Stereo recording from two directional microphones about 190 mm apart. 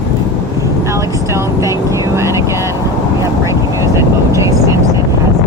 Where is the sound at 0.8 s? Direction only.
15° right (ahead or behind).